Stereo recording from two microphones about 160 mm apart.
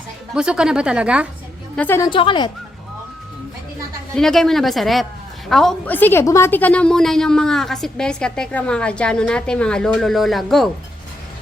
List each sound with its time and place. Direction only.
0.3 s a woman's voice: 5° right (ahead or behind)
1.7 s a woman's voice: 10° left (ahead or behind)
2.0 s speech: 30° left (ahead or behind)
4.1 s a woman's voice: centre (ahead or behind)